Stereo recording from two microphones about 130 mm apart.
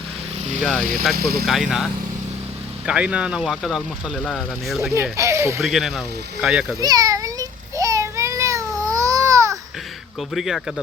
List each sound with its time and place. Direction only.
1.0 s speech: centre (ahead or behind)
5.1 s speech: 20° right (ahead or behind)
5.6 s speech: centre (ahead or behind)
6.7 s a sound: 30° right (ahead or behind)
10.2 s speech: centre (ahead or behind)